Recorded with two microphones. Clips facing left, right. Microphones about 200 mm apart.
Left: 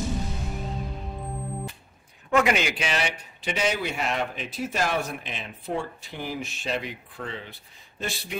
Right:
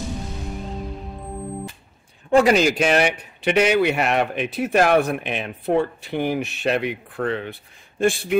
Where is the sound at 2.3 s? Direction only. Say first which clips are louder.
Right 7 dB; 35° right (ahead or behind).